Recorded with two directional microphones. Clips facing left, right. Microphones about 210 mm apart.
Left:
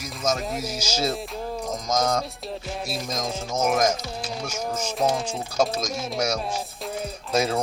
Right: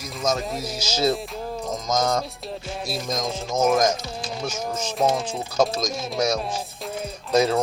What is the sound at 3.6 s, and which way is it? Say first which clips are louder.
Speech: right 3 dB; 30° right (ahead or behind).